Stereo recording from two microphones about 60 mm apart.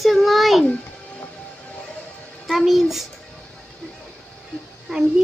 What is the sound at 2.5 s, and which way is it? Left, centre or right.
Speech, centre.